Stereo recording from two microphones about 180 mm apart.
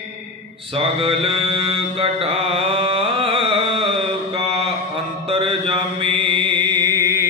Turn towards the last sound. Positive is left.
turn(degrees=-15)  # may be behind; listen again after turning